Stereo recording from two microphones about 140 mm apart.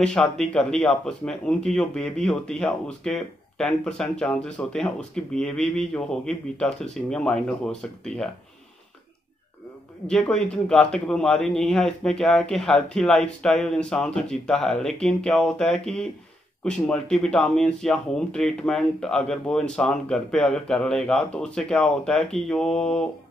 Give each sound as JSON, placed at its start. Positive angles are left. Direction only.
{"t": 0.0, "sound": "speech", "side_deg": 5}
{"t": 10.0, "sound": "speech", "side_deg": 5}